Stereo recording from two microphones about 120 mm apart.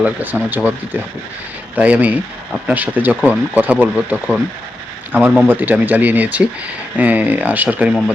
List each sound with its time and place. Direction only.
0.0 s speech: 15° right (ahead or behind)
1.7 s speech: 10° right (ahead or behind)